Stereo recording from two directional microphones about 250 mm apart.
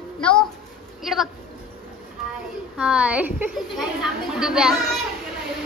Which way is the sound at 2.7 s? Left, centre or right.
Centre.